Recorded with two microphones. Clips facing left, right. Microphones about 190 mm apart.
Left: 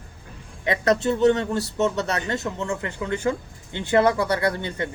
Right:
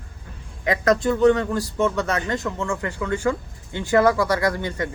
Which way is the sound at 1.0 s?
25° left (ahead or behind).